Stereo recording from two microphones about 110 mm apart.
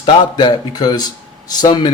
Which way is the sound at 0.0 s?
45° left (ahead or behind).